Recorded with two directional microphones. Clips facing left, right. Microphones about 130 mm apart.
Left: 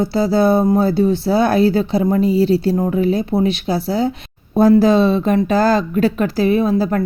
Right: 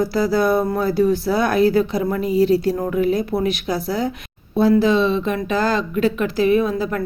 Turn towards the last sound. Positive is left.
turn(degrees=35)  # may be behind; listen again after turning